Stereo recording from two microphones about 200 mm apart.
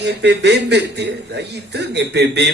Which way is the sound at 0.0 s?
55° right (ahead or behind).